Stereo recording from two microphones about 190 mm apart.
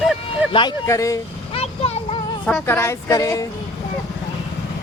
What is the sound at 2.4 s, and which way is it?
Speech, 10° left (ahead or behind).